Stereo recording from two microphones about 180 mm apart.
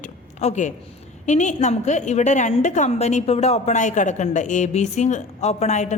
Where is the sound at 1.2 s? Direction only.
40° left (ahead or behind).